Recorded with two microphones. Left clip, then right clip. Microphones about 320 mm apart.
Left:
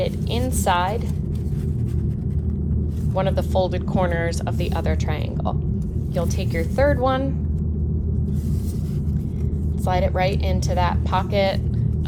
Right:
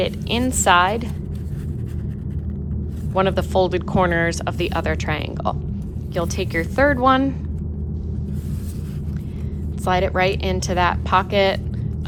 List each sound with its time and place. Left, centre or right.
0.0 s a sound: right
3.2 s speech: right
9.8 s speech: right